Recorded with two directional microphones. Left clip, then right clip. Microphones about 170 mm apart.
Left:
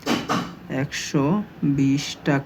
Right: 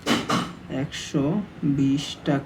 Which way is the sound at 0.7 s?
55° left (ahead or behind).